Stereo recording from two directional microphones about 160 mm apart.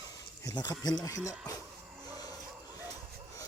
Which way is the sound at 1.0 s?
20° left (ahead or behind).